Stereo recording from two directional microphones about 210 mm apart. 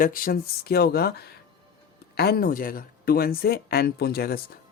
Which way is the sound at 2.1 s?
50° left (ahead or behind).